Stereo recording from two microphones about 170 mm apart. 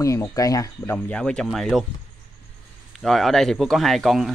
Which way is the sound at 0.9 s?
5° left (ahead or behind).